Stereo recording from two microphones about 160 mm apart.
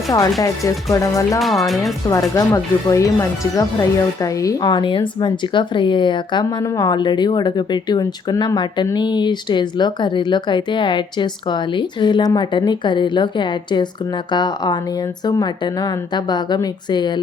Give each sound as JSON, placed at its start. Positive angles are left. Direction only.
{"t": 0.4, "sound": "speech", "side_deg": 20}
{"t": 1.4, "sound": "speech", "side_deg": 0}
{"t": 1.8, "sound": "speech", "side_deg": 20}